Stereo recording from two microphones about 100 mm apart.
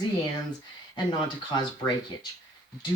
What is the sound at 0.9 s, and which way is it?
Speech, 45° left (ahead or behind).